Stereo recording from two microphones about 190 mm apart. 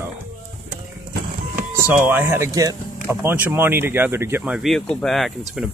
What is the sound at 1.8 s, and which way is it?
Speech, 10° right (ahead or behind).